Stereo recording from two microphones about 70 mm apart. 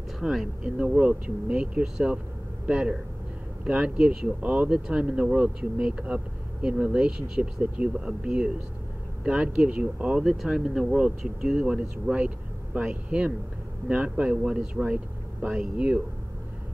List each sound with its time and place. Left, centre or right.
0.2 s speech: centre
0.7 s speech: right
10.2 s speech: centre